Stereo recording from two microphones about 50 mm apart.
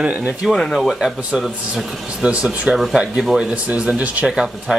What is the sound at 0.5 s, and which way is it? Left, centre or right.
Speech, centre.